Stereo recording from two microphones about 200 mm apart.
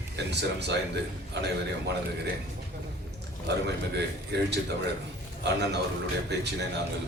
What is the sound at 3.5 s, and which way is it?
Speech, 60° right (ahead or behind).